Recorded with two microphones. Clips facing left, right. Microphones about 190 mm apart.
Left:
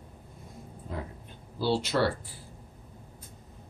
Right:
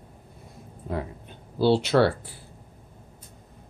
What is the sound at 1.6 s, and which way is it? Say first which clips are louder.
Speech: right 7 dB; 65° right (ahead or behind).